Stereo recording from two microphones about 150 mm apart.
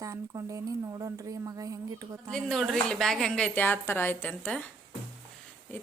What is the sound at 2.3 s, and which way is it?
A woman's voice, centre (ahead or behind).